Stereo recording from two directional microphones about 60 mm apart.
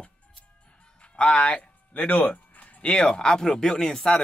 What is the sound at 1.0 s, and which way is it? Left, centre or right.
Speech, centre.